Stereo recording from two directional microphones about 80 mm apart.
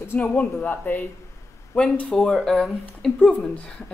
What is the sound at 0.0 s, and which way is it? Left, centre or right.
Speech, left.